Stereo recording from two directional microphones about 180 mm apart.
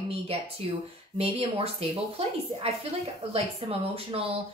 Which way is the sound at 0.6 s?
35° right (ahead or behind).